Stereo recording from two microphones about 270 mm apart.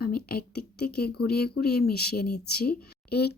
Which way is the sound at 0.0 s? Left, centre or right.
Left.